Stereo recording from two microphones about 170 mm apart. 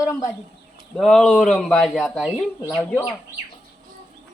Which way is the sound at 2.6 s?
20° left (ahead or behind).